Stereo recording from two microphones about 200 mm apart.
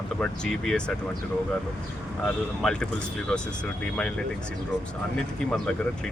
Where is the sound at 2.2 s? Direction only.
5° left (ahead or behind).